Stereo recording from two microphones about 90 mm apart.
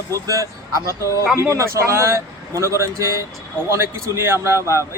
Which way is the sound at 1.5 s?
35° right (ahead or behind).